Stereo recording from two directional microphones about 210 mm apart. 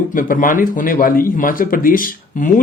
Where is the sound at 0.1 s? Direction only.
40° left (ahead or behind).